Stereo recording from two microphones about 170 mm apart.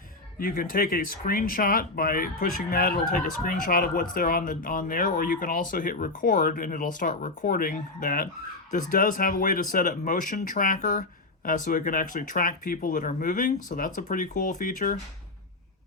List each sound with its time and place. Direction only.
0.3 s speech: 60° left (ahead or behind)